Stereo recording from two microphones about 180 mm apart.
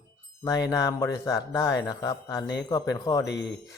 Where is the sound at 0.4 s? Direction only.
20° left (ahead or behind).